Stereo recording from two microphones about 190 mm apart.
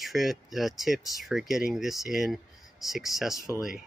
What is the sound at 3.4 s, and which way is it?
Speech, 20° left (ahead or behind).